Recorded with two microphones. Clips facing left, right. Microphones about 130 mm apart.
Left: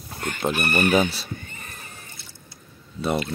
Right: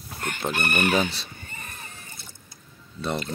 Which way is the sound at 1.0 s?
5° left (ahead or behind).